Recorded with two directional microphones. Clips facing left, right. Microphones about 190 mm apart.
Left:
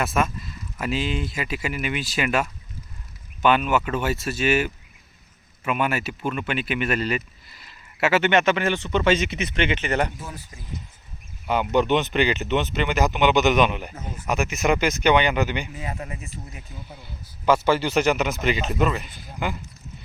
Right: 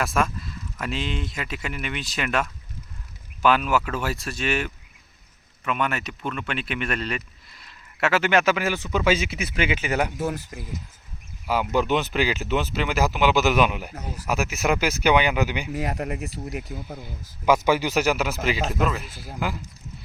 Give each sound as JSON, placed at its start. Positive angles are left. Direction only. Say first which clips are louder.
{"t": 0.0, "sound": "speech", "louder": "left 1 dB", "side_deg": 0}
{"t": 10.2, "sound": "speech", "louder": "right 10 dB", "side_deg": -75}
{"t": 11.4, "sound": "speech", "louder": "left 2 dB", "side_deg": -5}
{"t": 15.7, "sound": "speech", "louder": "right 6 dB", "side_deg": -70}
{"t": 16.5, "sound": "speech", "louder": "right 11 dB", "side_deg": -75}
{"t": 17.4, "sound": "speech", "louder": "even", "side_deg": -10}